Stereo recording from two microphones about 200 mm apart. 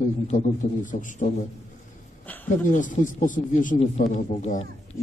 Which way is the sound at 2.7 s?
40° left (ahead or behind).